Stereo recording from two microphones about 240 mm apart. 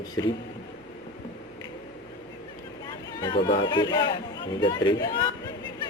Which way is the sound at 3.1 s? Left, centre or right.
Centre.